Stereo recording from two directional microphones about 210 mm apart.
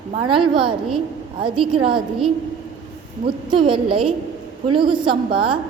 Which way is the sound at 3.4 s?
25° right (ahead or behind).